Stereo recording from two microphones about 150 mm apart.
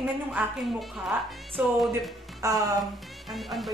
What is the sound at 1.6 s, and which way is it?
Speech, 10° right (ahead or behind).